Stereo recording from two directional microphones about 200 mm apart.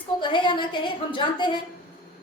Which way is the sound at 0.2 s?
25° left (ahead or behind).